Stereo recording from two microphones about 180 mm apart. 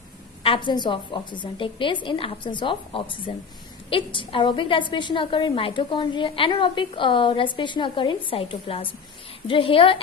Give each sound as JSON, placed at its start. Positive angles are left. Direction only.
{"t": 0.4, "sound": "a woman's voice", "side_deg": 30}